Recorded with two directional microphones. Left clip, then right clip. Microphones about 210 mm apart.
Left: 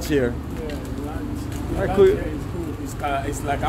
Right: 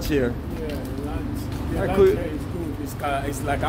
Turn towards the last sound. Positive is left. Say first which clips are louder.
# left 1 dB
turn(degrees=0)  # may be behind; listen again after turning